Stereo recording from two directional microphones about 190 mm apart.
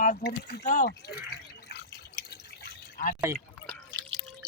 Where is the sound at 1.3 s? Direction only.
60° left (ahead or behind).